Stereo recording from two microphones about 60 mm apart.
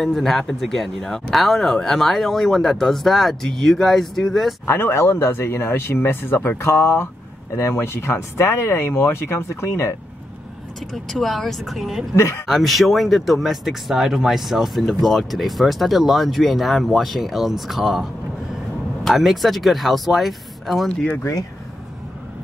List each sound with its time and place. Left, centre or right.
0.0 s speech: centre
4.6 s speech: left
10.9 s speech: centre
12.2 s speech: left
12.4 s speech: centre
20.9 s speech: centre
21.2 s speech: left